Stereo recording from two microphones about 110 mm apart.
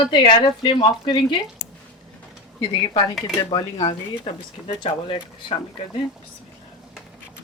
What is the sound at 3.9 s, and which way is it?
Speech, 65° left (ahead or behind).